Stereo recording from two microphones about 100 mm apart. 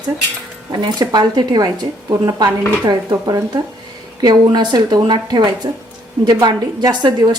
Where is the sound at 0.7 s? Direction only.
45° right (ahead or behind).